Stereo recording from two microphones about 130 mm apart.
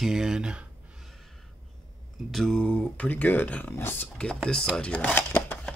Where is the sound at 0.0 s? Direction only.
5° right (ahead or behind).